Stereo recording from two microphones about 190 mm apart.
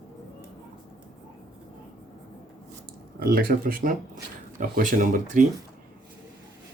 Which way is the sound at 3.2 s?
50° right (ahead or behind).